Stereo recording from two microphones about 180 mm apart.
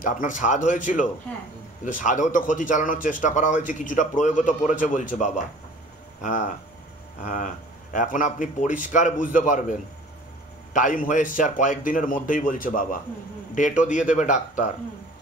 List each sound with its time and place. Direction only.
0.0 s speech: 45° left (ahead or behind)
7.9 s speech: 45° left (ahead or behind)